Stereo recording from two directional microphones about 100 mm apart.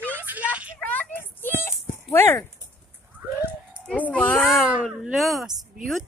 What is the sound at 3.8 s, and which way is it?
Speech, 15° left (ahead or behind).